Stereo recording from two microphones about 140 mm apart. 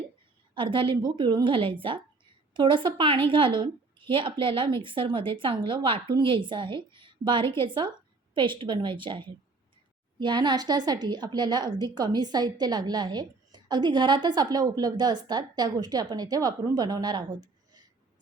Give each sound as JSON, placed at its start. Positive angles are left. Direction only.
{"t": 0.5, "sound": "a woman's voice", "side_deg": -35}
{"t": 7.4, "sound": "a woman's voice", "side_deg": 20}
{"t": 7.7, "sound": "a woman's voice", "side_deg": -35}